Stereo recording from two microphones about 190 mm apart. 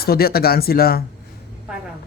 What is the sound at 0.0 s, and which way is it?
A man's voice, 55° left (ahead or behind).